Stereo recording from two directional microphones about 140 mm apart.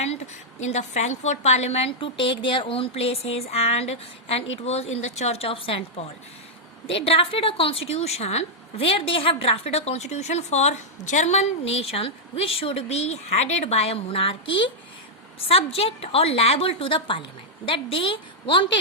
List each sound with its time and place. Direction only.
0.7 s a woman's voice: 55° left (ahead or behind); by 18.8 s 40° left (ahead or behind)